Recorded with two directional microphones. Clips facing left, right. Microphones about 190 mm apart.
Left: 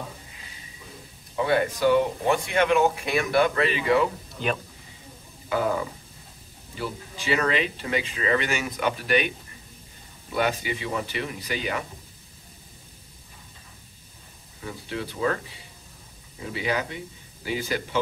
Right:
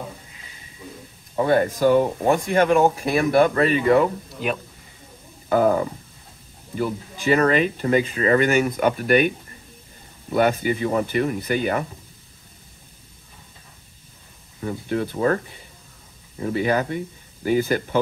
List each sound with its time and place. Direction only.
1.3 s speech: 45° right (ahead or behind)
4.4 s a man's voice: 5° right (ahead or behind)
5.5 s speech: 45° right (ahead or behind)
10.3 s speech: 50° right (ahead or behind)
14.6 s speech: 50° right (ahead or behind)